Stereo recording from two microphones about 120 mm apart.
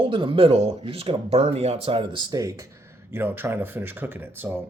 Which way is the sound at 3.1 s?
15° right (ahead or behind).